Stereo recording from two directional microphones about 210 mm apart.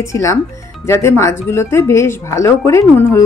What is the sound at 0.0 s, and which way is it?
Speech, 15° left (ahead or behind).